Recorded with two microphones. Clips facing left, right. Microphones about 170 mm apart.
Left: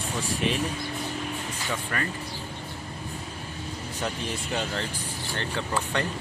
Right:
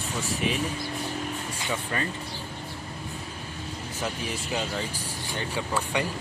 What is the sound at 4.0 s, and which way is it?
Speech, 5° right (ahead or behind).